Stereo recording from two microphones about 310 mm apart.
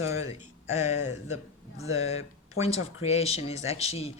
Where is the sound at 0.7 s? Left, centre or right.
Left.